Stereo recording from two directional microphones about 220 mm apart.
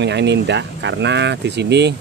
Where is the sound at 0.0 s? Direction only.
50° right (ahead or behind).